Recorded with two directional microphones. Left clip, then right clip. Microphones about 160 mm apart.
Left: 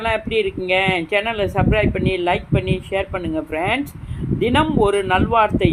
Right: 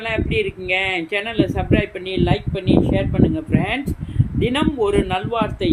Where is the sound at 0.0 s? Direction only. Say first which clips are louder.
Left 2 dB; 15° left (ahead or behind).